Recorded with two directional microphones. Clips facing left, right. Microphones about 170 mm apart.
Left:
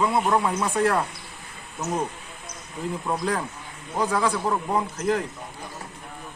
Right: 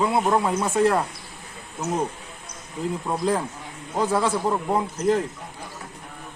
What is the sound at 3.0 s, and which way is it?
Speech, 25° right (ahead or behind).